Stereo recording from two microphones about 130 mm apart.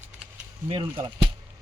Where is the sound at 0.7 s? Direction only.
35° right (ahead or behind).